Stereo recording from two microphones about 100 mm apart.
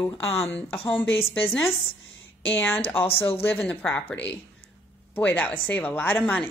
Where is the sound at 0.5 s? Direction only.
10° left (ahead or behind).